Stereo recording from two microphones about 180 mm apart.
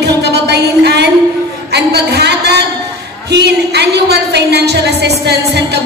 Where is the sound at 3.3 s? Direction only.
70° right (ahead or behind).